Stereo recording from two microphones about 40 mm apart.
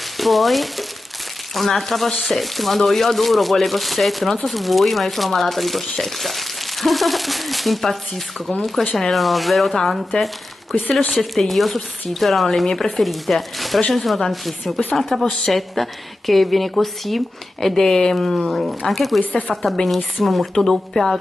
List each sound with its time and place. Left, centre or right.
0.2 s speech: centre
10.7 s speech: left
11.1 s speech: centre
20.6 s speech: centre